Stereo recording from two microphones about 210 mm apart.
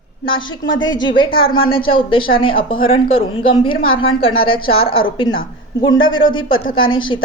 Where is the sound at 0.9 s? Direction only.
20° left (ahead or behind).